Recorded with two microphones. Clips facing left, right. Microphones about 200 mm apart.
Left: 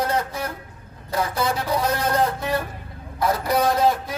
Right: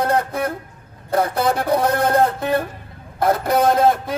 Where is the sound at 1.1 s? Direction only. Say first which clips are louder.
Right 5 dB; 55° right (ahead or behind).